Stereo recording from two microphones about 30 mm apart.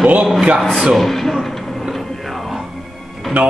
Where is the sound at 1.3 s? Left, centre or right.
Centre.